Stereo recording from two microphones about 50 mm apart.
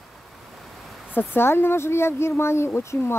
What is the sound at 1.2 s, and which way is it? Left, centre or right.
Speech, left.